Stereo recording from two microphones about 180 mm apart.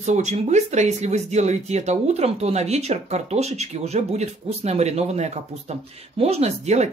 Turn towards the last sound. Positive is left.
turn(degrees=-40)  # may be behind; listen again after turning